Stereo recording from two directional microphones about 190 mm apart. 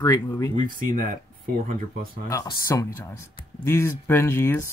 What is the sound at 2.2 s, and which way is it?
Speech, 15° left (ahead or behind).